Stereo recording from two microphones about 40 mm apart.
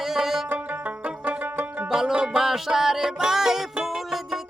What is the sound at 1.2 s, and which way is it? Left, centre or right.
Music, right.